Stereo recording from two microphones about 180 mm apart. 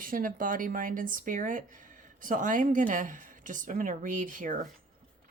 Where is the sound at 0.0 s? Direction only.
50° right (ahead or behind).